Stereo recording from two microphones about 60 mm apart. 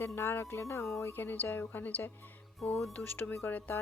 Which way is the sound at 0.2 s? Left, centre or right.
Left.